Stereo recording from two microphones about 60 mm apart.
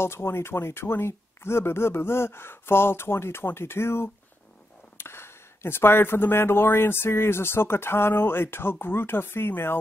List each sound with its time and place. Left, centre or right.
0.0 s speech: left